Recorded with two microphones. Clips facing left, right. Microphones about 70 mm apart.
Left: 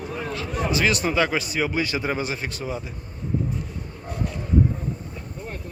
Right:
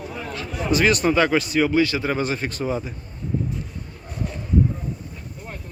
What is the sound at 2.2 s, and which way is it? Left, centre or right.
Speech, centre.